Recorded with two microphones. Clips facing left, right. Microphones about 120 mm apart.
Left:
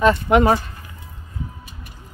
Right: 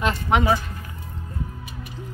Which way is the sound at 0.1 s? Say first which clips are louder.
Left 5 dB; 50° left (ahead or behind).